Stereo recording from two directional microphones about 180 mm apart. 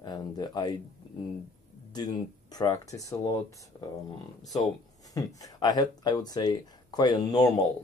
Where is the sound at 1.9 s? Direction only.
25° left (ahead or behind).